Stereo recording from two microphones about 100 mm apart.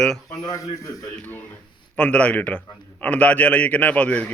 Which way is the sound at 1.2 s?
20° left (ahead or behind).